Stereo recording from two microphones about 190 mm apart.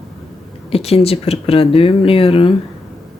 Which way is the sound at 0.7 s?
30° left (ahead or behind).